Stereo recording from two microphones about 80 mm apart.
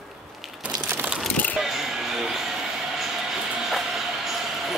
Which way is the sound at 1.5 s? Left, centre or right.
Centre.